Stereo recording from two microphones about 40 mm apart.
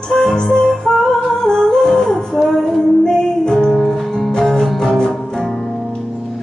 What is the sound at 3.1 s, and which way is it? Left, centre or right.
Music, centre.